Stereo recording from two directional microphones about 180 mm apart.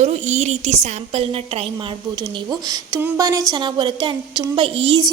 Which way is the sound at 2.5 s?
20° right (ahead or behind).